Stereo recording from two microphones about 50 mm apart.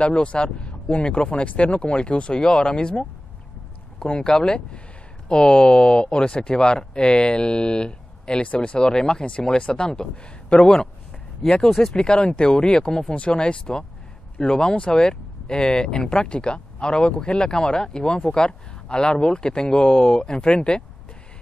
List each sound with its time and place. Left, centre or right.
0.0 s speech: left; by 12.0 s centre
12.0 s speech: centre